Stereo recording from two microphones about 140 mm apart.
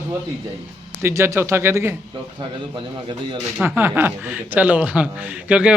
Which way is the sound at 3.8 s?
15° right (ahead or behind).